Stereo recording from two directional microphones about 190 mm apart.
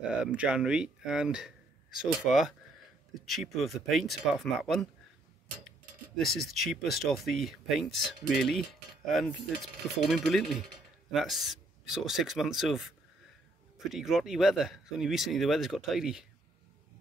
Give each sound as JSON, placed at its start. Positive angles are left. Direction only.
{"t": 0.0, "sound": "speech", "side_deg": -5}
{"t": 6.1, "sound": "speech", "side_deg": 0}